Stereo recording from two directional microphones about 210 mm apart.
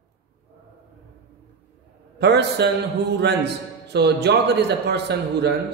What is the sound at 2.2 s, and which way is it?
A man's voice, 55° right (ahead or behind).